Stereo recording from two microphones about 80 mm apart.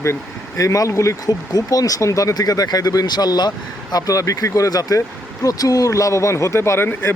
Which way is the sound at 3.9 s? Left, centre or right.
Left.